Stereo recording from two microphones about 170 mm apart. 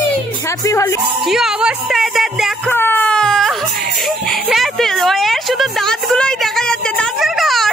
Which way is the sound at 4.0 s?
Centre (ahead or behind).